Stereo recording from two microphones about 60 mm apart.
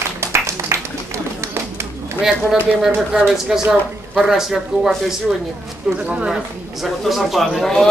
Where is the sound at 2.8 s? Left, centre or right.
Centre.